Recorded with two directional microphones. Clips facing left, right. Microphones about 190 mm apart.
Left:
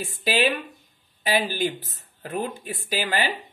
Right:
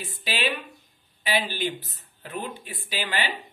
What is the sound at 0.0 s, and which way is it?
Speech, 45° left (ahead or behind).